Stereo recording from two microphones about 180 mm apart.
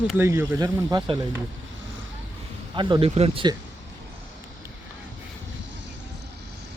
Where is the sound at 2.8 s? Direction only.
25° right (ahead or behind).